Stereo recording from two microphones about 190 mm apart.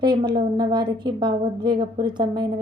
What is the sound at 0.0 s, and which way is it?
A woman's voice, 25° right (ahead or behind).